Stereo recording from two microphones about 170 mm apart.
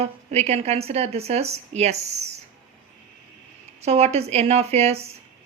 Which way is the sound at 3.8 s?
40° right (ahead or behind).